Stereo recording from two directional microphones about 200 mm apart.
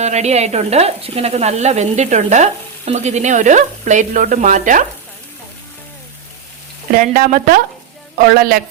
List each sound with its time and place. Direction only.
0.0 s speech: 35° right (ahead or behind)
6.9 s speech: 45° right (ahead or behind)